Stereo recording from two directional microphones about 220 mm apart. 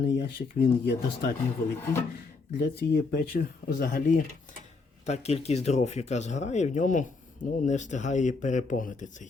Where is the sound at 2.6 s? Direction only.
45° left (ahead or behind).